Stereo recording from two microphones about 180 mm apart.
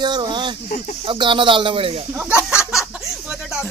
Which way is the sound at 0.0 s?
25° right (ahead or behind).